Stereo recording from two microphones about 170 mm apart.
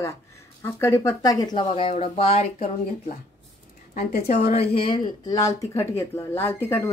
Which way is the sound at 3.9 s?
55° left (ahead or behind).